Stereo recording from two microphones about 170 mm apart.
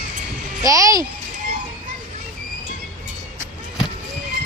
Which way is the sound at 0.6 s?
20° right (ahead or behind).